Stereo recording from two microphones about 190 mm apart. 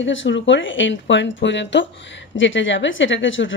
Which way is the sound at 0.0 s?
85° left.